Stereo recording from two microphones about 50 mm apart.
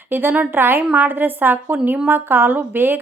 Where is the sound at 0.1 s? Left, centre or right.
Right.